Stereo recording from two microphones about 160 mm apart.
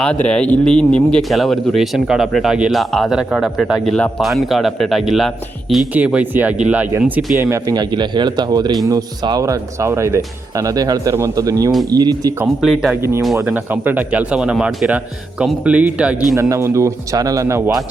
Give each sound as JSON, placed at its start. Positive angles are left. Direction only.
{"t": 0.0, "sound": "speech", "side_deg": 5}
{"t": 12.6, "sound": "speech", "side_deg": -5}
{"t": 13.0, "sound": "speech", "side_deg": -15}
{"t": 16.3, "sound": "speech", "side_deg": -20}